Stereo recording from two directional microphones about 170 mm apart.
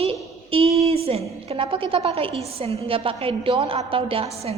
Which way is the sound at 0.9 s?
35° right (ahead or behind).